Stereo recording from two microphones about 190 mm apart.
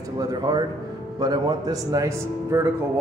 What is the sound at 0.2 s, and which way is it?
A man's voice, 20° right (ahead or behind).